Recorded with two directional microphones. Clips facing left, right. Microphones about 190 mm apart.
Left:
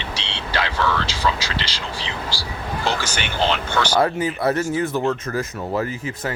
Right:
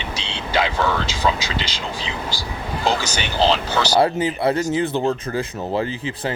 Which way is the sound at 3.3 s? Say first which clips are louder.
Right 4 dB; 35° right (ahead or behind).